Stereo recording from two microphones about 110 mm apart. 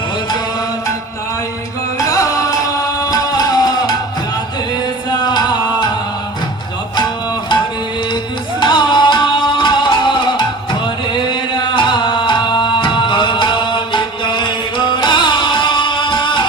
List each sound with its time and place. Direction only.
2.0 s music: 30° left (ahead or behind)
5.2 s music: 40° left (ahead or behind)
8.6 s music: 45° left (ahead or behind)